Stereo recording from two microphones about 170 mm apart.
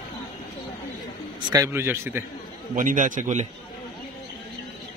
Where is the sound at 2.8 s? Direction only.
50° right (ahead or behind).